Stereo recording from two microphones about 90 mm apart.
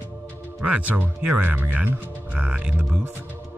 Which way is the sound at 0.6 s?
15° right (ahead or behind).